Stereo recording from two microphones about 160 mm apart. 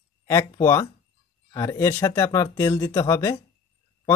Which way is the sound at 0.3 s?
20° left (ahead or behind).